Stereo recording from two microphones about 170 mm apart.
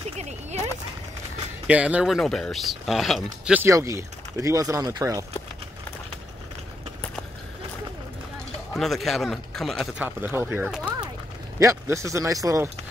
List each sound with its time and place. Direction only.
1.7 s speech: 10° right (ahead or behind)
3.4 s speech: 10° right (ahead or behind)
8.7 s speech: centre (ahead or behind)
9.9 s speech: 10° right (ahead or behind)